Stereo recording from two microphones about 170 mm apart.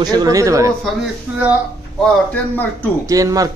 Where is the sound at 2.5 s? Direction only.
10° left (ahead or behind).